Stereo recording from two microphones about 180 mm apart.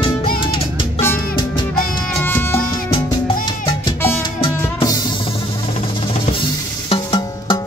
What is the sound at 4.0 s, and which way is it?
Music, 10° left (ahead or behind).